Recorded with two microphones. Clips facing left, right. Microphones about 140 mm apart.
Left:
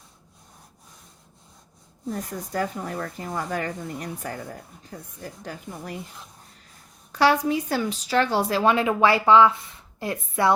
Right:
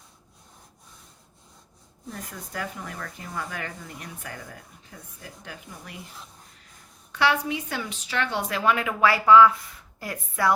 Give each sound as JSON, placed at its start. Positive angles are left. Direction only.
{"t": 2.0, "sound": "speech", "side_deg": 40}
{"t": 7.1, "sound": "a woman's voice", "side_deg": 40}